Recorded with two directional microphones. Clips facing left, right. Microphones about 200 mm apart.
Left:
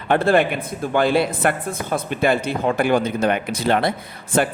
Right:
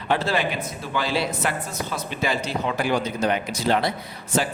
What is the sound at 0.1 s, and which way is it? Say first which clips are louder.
A man's voice: left 7 dB; 55° left (ahead or behind).